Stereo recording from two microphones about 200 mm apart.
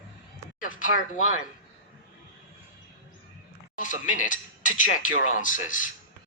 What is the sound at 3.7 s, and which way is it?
Speech, 40° left (ahead or behind).